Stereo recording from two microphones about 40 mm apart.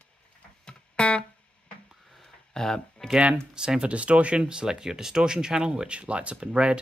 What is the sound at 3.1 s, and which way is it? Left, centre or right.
Speech, right.